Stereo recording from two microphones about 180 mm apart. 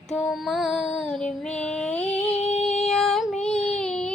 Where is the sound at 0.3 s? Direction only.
Centre (ahead or behind).